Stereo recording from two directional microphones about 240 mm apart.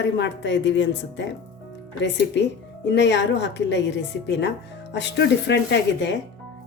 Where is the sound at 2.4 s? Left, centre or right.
Left.